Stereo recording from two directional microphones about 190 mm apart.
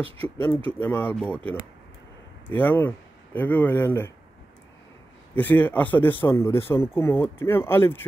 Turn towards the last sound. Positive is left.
turn(degrees=10)  # may be behind; listen again after turning